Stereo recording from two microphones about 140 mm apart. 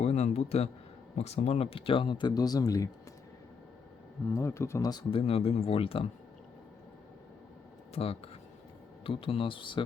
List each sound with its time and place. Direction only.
0.0 s a sound: 55° left (ahead or behind)
1.1 s speech: 50° left (ahead or behind); by 2.9 s 25° left (ahead or behind)
4.4 s speech: 20° left (ahead or behind)
5.2 s speech: 45° left (ahead or behind)
7.9 s speech: 45° left (ahead or behind)